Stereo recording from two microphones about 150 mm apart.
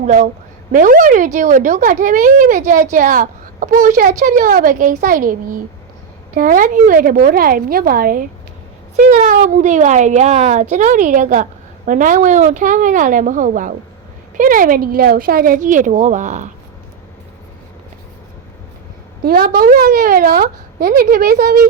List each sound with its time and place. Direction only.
0.0 s a woman's voice: 55° right (ahead or behind); by 8.2 s 75° right (ahead or behind)
9.0 s speech: 55° right (ahead or behind)
19.2 s a woman's voice: 90° right